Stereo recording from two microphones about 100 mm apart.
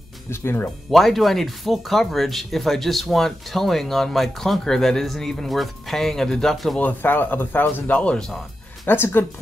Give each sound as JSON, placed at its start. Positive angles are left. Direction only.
{"t": 0.3, "sound": "speech", "side_deg": 25}
{"t": 0.9, "sound": "speech", "side_deg": 0}
{"t": 6.8, "sound": "speech", "side_deg": 20}
{"t": 8.8, "sound": "speech", "side_deg": 20}